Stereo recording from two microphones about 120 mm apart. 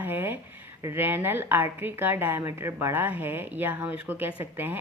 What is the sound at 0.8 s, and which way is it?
Speech, 20° right (ahead or behind).